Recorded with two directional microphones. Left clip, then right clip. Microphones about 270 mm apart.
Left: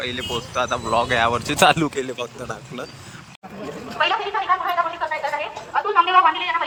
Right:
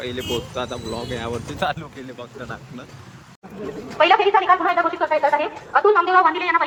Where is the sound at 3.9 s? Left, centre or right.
Right.